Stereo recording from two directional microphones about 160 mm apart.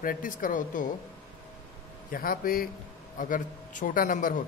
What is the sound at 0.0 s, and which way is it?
Speech, 60° left (ahead or behind).